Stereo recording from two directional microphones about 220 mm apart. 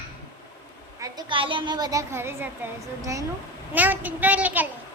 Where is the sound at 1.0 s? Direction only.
20° right (ahead or behind).